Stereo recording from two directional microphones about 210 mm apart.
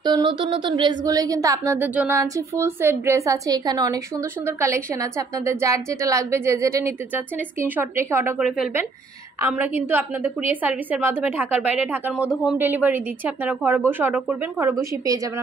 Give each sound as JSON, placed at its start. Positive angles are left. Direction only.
{"t": 0.0, "sound": "a woman's voice", "side_deg": -20}